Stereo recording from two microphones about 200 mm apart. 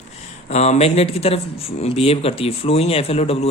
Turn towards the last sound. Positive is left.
turn(degrees=30)  # may be behind; listen again after turning